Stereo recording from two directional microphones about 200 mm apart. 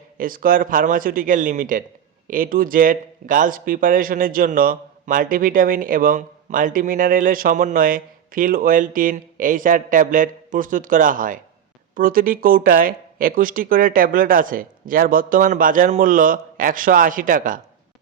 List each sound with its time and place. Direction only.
0.2 s speech: 45° right (ahead or behind)